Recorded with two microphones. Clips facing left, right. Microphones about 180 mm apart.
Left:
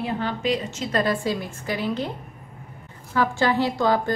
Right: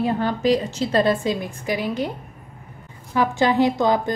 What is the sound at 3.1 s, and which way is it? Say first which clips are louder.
A woman's voice: right 3 dB; 15° right (ahead or behind).